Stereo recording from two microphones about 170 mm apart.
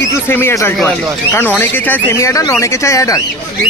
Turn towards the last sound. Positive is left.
turn(degrees=20)  # may be behind; listen again after turning